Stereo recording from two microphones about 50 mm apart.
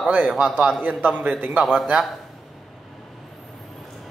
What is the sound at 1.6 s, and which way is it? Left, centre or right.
Speech, centre.